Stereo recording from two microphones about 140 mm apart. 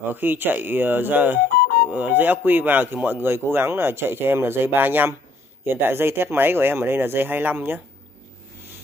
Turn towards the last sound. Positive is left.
turn(degrees=-15)  # may be behind; listen again after turning